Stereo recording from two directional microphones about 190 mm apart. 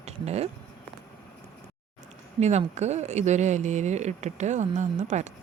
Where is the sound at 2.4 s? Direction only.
35° right (ahead or behind).